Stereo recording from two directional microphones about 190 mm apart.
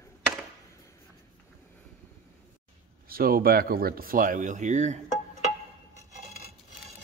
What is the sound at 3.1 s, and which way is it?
Speech, 50° right (ahead or behind).